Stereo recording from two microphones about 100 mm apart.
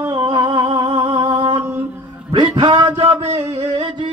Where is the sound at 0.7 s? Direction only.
45° right (ahead or behind).